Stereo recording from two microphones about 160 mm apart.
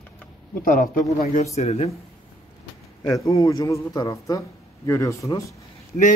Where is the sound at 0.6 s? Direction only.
55° left (ahead or behind).